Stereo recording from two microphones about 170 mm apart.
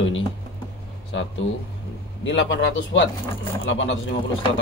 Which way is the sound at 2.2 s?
90° left.